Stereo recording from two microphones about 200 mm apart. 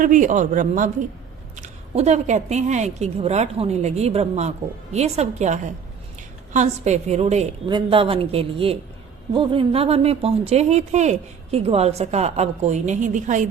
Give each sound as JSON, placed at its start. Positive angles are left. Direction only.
{"t": 0.0, "sound": "a woman's voice", "side_deg": -40}